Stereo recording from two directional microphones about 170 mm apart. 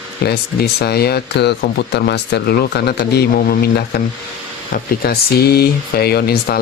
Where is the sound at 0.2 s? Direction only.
70° left (ahead or behind).